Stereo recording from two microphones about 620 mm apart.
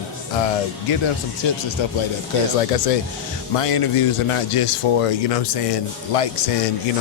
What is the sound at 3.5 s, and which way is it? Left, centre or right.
Speech, left.